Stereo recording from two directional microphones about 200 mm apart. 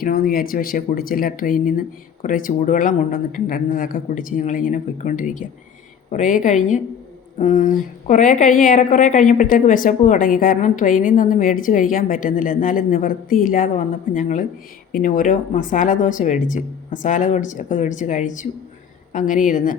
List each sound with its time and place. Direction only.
0.0 s a woman's voice: 50° left (ahead or behind)